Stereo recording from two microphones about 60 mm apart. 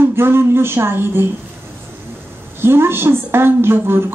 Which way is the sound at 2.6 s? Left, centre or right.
Right.